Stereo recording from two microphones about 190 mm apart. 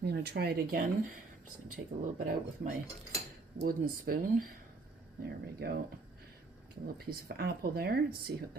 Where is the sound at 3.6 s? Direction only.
50° right (ahead or behind).